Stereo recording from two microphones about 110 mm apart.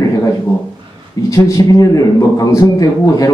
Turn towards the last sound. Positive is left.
turn(degrees=35)  # may be behind; listen again after turning